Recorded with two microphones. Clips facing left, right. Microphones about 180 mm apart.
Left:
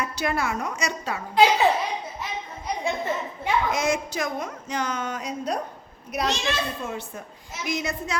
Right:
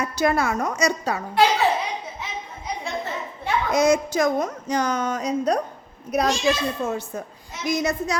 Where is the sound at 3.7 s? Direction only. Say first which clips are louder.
Right 6 dB; 40° right (ahead or behind).